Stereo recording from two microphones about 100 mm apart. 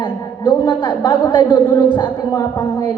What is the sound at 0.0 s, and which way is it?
A woman's voice, 55° left (ahead or behind).